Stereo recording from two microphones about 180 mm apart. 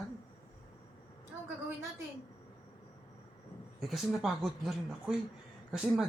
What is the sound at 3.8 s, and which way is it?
Speech, centre (ahead or behind).